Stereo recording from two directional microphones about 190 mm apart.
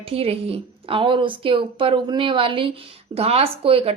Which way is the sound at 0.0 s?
30° right (ahead or behind).